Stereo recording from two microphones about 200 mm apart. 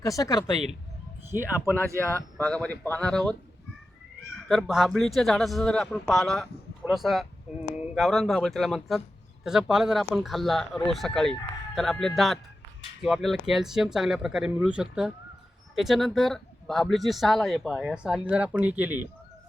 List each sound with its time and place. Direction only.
0.0 s speech: 15° left (ahead or behind)
1.3 s speech: 45° right (ahead or behind)
2.4 s speech: 5° left (ahead or behind)
4.4 s speech: centre (ahead or behind)